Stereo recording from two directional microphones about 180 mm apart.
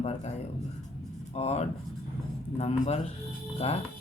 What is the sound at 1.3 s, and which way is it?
Speech, 35° left (ahead or behind).